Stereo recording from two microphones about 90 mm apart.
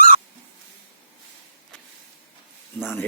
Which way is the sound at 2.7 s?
25° left (ahead or behind).